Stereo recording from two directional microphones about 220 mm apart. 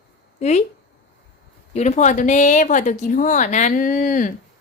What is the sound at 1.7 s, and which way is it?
A child's voice, 30° left (ahead or behind).